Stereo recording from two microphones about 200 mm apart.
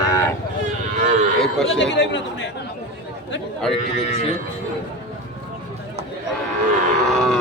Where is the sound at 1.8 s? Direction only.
65° left (ahead or behind).